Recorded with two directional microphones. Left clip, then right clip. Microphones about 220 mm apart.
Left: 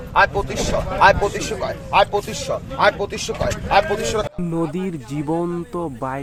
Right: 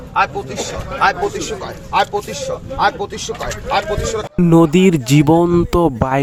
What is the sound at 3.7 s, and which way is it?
Speech, 25° left (ahead or behind).